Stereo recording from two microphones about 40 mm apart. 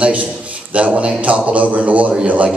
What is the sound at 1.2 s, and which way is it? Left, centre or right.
Speech, right.